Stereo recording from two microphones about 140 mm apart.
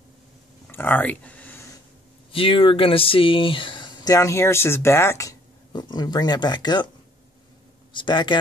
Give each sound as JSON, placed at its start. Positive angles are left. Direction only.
{"t": 0.7, "sound": "a sound", "side_deg": 15}
{"t": 2.3, "sound": "speech", "side_deg": 40}
{"t": 7.9, "sound": "speech", "side_deg": 35}